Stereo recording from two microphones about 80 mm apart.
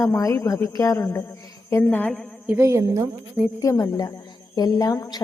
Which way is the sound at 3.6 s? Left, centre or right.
Left.